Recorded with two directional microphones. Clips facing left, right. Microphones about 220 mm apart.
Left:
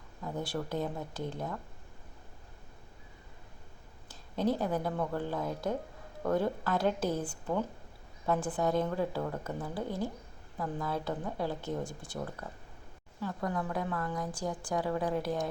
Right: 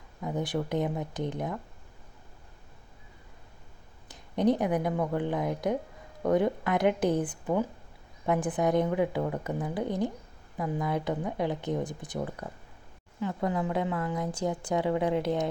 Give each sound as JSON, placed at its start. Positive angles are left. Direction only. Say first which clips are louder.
{"t": 0.2, "sound": "a woman's voice", "louder": "right 5 dB", "side_deg": -15}
{"t": 4.1, "sound": "a woman's voice", "louder": "right 5 dB", "side_deg": -20}